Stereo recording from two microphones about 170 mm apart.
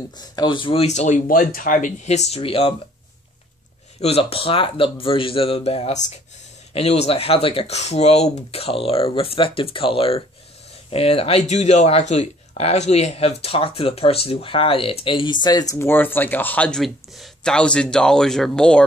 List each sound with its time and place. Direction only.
0.2 s speech: 25° left (ahead or behind)
4.0 s speech: 35° left (ahead or behind); by 18.9 s 5° left (ahead or behind)